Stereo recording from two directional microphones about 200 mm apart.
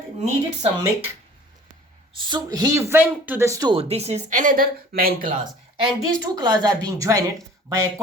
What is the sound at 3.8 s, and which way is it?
Speech, 30° right (ahead or behind).